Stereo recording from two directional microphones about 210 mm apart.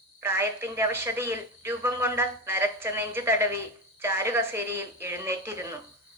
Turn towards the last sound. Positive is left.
turn(degrees=-15)  # may be behind; listen again after turning